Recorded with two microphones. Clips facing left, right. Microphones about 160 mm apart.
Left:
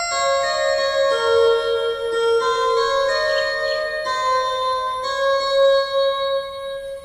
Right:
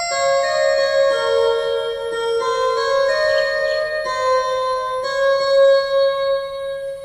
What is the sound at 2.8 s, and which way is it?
Music, 40° right (ahead or behind).